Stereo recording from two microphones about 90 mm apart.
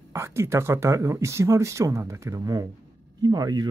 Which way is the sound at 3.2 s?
50° right (ahead or behind).